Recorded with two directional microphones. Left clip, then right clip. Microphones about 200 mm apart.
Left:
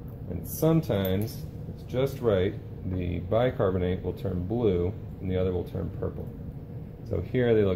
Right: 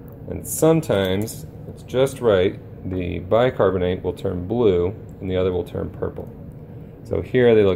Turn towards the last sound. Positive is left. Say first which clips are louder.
# right 9 dB
turn(degrees=-45)  # may be behind; listen again after turning